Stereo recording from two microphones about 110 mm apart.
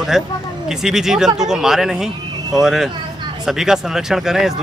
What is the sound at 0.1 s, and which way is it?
Speech, 5° right (ahead or behind).